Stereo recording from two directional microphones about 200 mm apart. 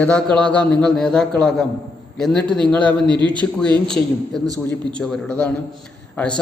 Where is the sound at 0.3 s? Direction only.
5° left (ahead or behind).